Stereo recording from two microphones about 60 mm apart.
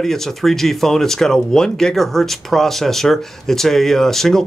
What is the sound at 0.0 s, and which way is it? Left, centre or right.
Speech, centre.